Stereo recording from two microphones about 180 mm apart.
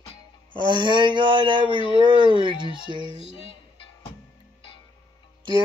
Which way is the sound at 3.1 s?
30° left (ahead or behind).